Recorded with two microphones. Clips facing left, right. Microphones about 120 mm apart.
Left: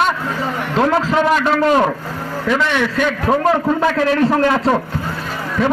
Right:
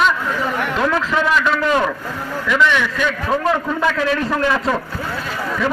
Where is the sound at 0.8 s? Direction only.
35° left (ahead or behind).